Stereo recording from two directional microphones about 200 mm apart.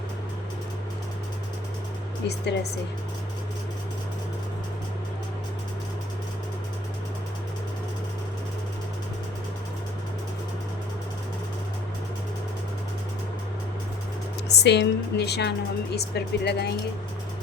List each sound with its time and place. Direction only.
2.2 s speech: 55° left (ahead or behind)
14.4 s speech: 60° left (ahead or behind)